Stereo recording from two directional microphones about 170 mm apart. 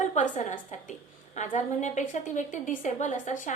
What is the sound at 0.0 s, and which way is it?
A woman's voice, 45° left (ahead or behind).